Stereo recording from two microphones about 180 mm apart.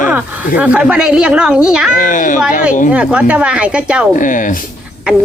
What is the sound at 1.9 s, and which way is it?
Speech, 45° left (ahead or behind).